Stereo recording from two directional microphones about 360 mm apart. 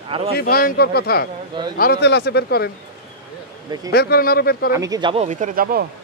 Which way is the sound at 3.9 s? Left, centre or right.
Left.